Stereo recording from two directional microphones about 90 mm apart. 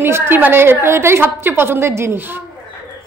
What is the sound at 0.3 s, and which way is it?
A woman's voice, 25° right (ahead or behind).